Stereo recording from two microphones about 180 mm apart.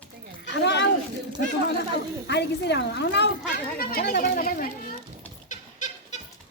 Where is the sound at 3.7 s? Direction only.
60° left (ahead or behind).